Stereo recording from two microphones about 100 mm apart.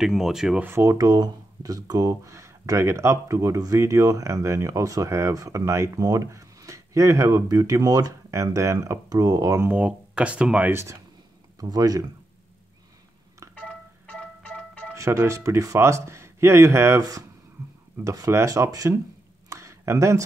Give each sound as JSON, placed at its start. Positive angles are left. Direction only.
{"t": 0.0, "sound": "speech", "side_deg": -5}
{"t": 0.7, "sound": "speech", "side_deg": -30}
{"t": 9.7, "sound": "speech", "side_deg": -10}
{"t": 10.7, "sound": "speech", "side_deg": -25}
{"t": 11.6, "sound": "speech", "side_deg": -40}
{"t": 13.6, "sound": "music", "side_deg": 10}
{"t": 15.0, "sound": "speech", "side_deg": -30}
{"t": 19.5, "sound": "a sound", "side_deg": -30}